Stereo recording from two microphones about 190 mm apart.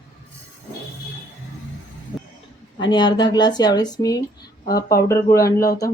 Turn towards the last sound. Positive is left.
turn(degrees=15)  # may be behind; listen again after turning